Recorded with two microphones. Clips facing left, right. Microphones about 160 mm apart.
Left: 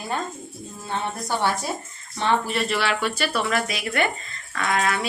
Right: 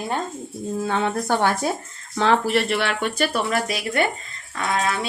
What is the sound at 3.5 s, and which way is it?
Speech, 40° right (ahead or behind).